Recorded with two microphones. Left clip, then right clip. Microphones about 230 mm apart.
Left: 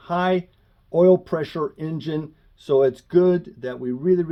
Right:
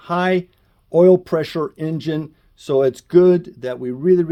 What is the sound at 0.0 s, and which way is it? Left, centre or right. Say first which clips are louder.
Speech: right 3 dB; right.